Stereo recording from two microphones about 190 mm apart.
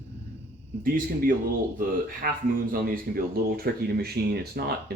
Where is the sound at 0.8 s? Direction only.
50° right (ahead or behind).